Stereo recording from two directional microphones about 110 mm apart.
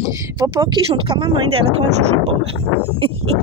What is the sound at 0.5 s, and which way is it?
Speech, 50° right (ahead or behind).